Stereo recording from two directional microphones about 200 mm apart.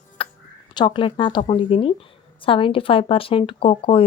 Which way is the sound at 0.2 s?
25° left (ahead or behind).